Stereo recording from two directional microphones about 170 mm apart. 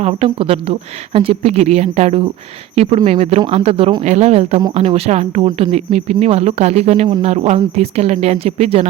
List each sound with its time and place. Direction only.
0.0 s speech: 35° right (ahead or behind)
5.5 s speech: 25° right (ahead or behind)
5.7 s speech: 40° right (ahead or behind)